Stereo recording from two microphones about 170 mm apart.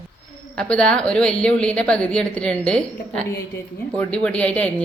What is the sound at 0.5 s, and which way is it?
A woman's voice, 5° left (ahead or behind).